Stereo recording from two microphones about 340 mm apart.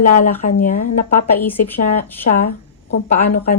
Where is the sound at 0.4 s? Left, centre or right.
Left.